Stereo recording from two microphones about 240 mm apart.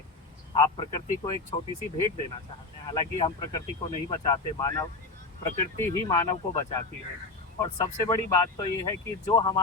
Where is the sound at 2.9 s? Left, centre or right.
Left.